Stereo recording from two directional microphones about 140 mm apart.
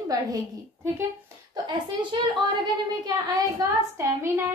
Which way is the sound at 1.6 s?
35° right (ahead or behind).